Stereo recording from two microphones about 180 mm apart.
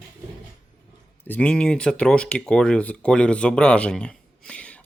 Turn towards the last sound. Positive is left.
turn(degrees=5)  # may be behind; listen again after turning